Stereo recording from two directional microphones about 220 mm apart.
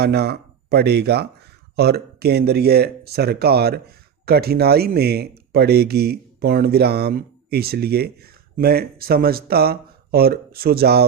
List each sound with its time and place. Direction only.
0.0 s speech: 45° right (ahead or behind)